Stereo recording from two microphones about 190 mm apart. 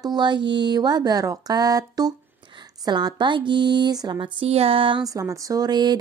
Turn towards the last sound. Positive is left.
turn(degrees=-20)  # may be behind; listen again after turning